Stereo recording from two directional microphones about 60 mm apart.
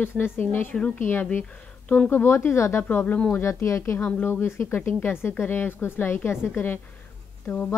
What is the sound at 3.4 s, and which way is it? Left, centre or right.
A woman's voice, left.